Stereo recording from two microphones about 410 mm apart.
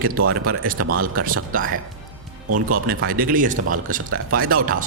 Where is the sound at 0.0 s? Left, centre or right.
Right.